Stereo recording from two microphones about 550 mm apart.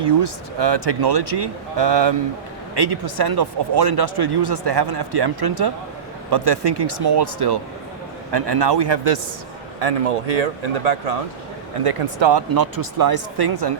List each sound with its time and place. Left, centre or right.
0.0 s speech: right
9.8 s speech: right
11.8 s speech: right
12.2 s speech: right